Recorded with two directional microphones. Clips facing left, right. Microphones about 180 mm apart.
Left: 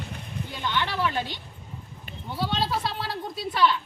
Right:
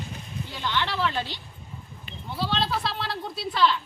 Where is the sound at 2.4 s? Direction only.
5° left (ahead or behind).